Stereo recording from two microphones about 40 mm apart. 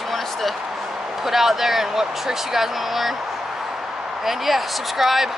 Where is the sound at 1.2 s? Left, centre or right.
Centre.